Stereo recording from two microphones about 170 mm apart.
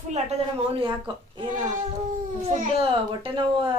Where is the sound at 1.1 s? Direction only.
25° right (ahead or behind).